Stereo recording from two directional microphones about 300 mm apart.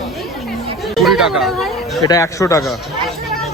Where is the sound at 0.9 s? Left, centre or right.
Centre.